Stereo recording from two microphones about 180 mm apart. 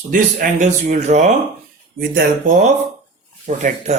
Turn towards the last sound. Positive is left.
turn(degrees=-45)  # may be behind; listen again after turning